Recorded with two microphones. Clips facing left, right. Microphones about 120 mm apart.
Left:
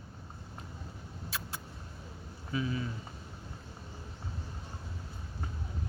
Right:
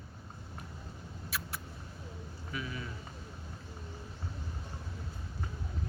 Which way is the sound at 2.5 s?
30° left (ahead or behind).